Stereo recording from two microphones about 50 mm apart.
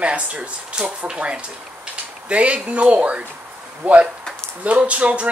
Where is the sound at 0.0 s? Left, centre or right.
Right.